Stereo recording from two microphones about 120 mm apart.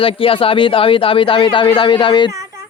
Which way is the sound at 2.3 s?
25° right (ahead or behind).